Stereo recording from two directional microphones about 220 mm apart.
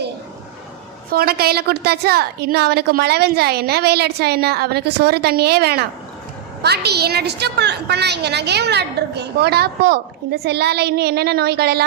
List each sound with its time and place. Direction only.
1.1 s a woman's voice: 45° right (ahead or behind)